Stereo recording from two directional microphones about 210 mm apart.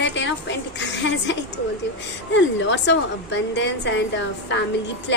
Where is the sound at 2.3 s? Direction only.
60° left (ahead or behind).